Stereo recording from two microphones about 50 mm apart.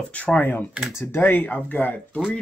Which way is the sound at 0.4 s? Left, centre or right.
Left.